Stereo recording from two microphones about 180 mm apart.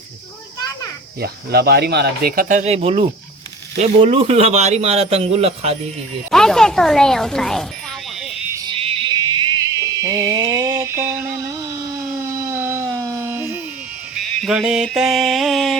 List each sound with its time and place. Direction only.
1.2 s a man's voice: 60° right (ahead or behind); by 5.7 s 35° right (ahead or behind)
6.3 s music: 5° left (ahead or behind)
8.4 s music: 10° right (ahead or behind)
8.6 s music: 30° right (ahead or behind); by 11.3 s 10° right (ahead or behind)
11.3 s a sound: 20° right (ahead or behind)
14.2 s music: centre (ahead or behind)